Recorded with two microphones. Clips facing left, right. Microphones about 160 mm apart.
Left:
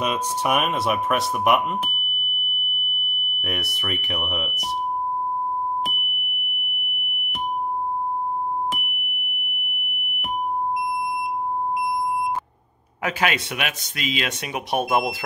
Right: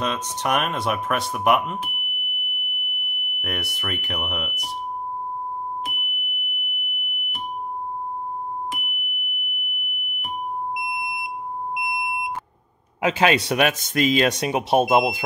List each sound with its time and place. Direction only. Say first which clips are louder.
0.0 s speech: left 2 dB; 10° left (ahead or behind)
3.3 s speech: even; centre (ahead or behind)
13.0 s speech: right 5 dB; 30° right (ahead or behind)